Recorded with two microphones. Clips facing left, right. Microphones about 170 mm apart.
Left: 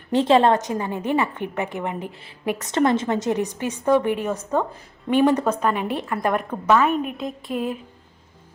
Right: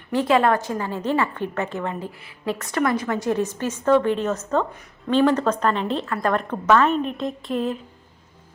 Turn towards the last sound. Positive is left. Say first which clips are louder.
# right 2 dB
turn(degrees=10)  # may be behind; listen again after turning